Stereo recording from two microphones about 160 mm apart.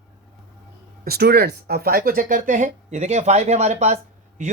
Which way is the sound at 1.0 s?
80° right.